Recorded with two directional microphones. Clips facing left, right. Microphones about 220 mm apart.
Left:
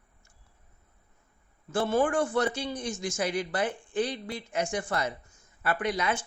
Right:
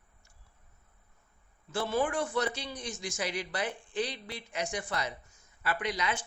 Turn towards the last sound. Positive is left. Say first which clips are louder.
# left 4 dB
turn(degrees=50)  # may be behind; listen again after turning